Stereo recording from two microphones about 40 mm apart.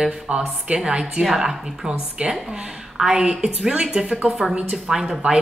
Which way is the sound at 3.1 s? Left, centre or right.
Centre.